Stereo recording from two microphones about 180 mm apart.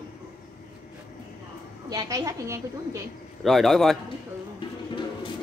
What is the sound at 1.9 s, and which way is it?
A woman's voice, 20° right (ahead or behind).